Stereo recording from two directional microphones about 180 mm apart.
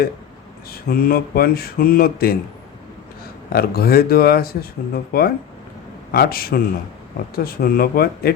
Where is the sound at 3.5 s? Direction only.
55° left (ahead or behind).